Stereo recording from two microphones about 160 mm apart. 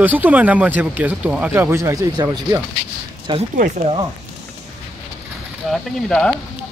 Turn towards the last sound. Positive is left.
turn(degrees=5)  # may be behind; listen again after turning